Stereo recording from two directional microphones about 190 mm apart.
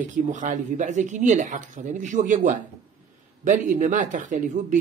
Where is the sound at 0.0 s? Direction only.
40° right (ahead or behind).